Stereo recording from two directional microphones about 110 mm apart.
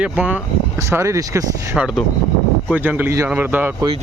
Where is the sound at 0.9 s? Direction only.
25° right (ahead or behind).